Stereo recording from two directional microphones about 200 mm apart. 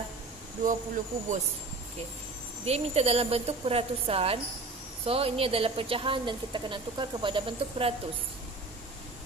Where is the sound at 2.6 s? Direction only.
30° right (ahead or behind).